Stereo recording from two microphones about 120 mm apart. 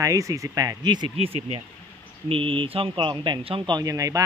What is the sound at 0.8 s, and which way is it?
Speech, 40° right (ahead or behind).